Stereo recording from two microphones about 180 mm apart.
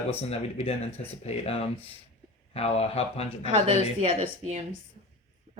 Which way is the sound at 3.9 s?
30° right (ahead or behind).